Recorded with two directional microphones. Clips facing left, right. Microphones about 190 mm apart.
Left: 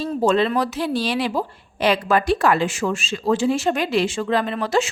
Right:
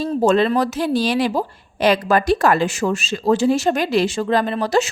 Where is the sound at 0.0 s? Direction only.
45° right (ahead or behind).